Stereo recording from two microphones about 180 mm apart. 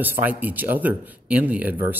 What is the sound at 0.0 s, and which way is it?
Speech, 10° right (ahead or behind).